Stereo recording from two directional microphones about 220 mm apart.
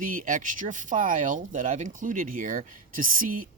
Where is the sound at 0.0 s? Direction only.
40° right (ahead or behind).